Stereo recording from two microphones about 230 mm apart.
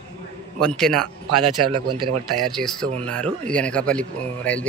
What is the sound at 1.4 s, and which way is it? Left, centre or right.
Speech, right.